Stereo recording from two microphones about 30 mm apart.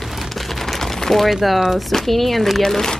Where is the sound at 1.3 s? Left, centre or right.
Centre.